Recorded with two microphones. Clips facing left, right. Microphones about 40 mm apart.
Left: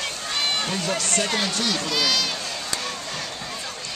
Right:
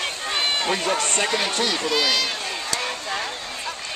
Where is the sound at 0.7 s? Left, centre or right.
Right.